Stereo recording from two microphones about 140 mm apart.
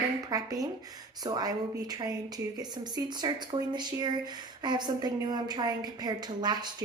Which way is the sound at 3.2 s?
30° right (ahead or behind).